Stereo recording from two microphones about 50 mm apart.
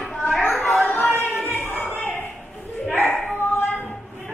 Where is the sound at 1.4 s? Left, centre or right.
Left.